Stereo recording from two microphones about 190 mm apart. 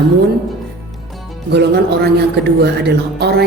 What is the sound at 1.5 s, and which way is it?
A man's voice, 60° right (ahead or behind).